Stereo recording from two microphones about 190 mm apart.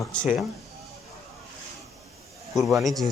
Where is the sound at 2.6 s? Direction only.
Centre (ahead or behind).